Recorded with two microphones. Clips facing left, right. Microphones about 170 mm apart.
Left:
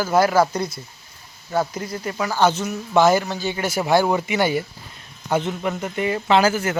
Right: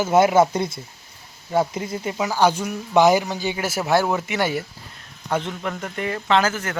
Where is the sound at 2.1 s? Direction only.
10° right (ahead or behind).